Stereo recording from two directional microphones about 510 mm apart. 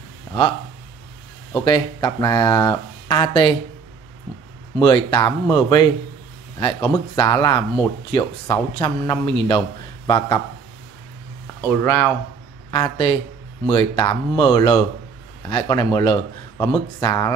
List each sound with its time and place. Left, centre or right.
1.5 s speech: centre
4.7 s speech: centre
11.6 s speech: centre